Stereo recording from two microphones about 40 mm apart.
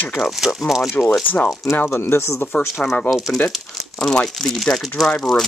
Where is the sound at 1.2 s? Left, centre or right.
Left.